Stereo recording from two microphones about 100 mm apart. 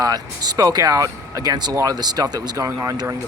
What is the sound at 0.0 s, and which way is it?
Speech, 40° right (ahead or behind).